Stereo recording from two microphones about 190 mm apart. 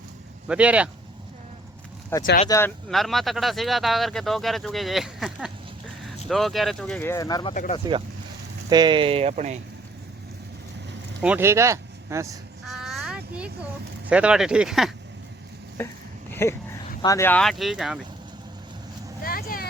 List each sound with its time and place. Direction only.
0.4 s speech: 5° right (ahead or behind)
2.1 s speech: 10° left (ahead or behind)
2.9 s speech: centre (ahead or behind); by 7.5 s 20° left (ahead or behind)
7.5 s speech: 45° left (ahead or behind)
8.7 s speech: 25° right (ahead or behind)
11.2 s speech: 10° right (ahead or behind)
12.6 s a sound: centre (ahead or behind)
14.1 s speech: 5° right (ahead or behind)
15.8 s speech: 10° left (ahead or behind)
16.3 s a sound: 15° left (ahead or behind)
17.0 s speech: 15° left (ahead or behind); by 18.0 s centre (ahead or behind)
19.2 s vehicle: 50° left (ahead or behind)